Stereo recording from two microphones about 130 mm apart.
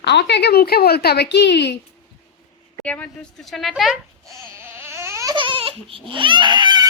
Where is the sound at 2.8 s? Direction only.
10° left (ahead or behind).